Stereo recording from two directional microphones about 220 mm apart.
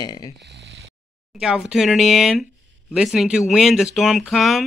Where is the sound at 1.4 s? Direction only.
5° right (ahead or behind).